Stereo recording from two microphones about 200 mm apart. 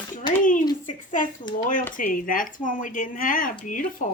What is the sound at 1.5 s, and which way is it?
Speech, 20° left (ahead or behind).